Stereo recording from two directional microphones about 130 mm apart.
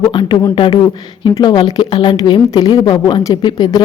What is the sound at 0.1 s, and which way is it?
A woman's voice, 35° left (ahead or behind).